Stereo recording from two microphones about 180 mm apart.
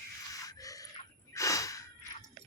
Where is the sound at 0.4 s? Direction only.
20° left (ahead or behind).